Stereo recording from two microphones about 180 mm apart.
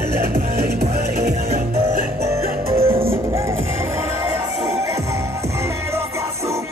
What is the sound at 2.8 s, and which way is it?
Music, 30° right (ahead or behind).